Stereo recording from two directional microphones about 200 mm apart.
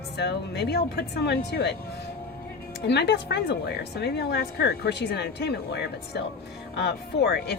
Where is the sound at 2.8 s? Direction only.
55° left (ahead or behind).